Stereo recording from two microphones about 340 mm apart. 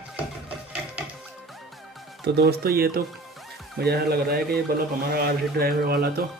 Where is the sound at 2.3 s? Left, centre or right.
Right.